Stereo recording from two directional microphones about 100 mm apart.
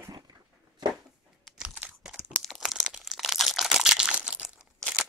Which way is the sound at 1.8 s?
10° right (ahead or behind).